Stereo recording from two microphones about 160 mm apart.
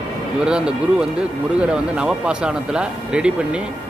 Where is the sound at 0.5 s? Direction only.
5° right (ahead or behind).